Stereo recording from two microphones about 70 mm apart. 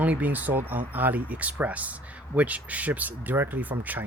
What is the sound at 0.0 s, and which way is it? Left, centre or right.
Speech, right.